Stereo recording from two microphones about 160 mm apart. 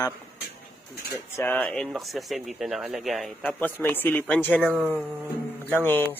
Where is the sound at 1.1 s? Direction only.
10° left (ahead or behind).